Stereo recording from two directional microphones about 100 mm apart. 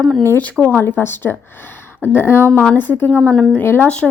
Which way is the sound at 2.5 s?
10° left (ahead or behind).